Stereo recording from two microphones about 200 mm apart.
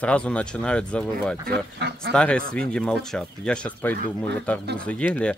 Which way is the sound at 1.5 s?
55° right (ahead or behind).